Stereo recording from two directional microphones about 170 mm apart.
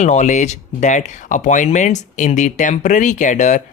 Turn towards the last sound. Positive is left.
turn(degrees=45)  # may be behind; listen again after turning